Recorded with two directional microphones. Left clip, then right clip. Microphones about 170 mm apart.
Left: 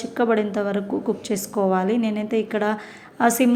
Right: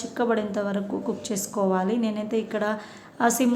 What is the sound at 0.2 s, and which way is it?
A woman's voice, 15° left (ahead or behind).